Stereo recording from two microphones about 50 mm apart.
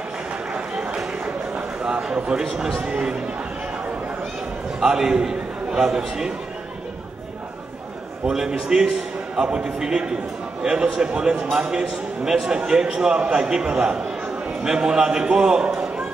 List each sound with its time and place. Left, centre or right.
1.8 s a sound: right
2.1 s speech: right
4.7 s a man's voice: centre
8.3 s a man's voice: centre